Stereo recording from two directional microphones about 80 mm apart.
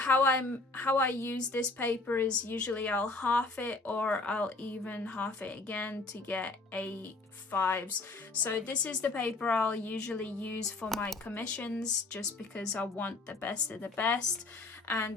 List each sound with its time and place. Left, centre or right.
0.0 s speech: left
14.8 s speech: left